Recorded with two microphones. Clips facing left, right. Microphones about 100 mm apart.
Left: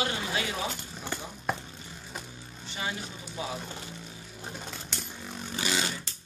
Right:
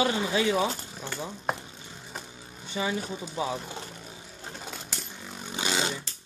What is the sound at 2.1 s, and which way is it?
Vehicle, centre (ahead or behind).